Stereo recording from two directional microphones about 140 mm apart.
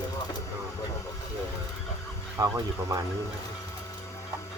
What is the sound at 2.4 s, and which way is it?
Speech, 25° right (ahead or behind).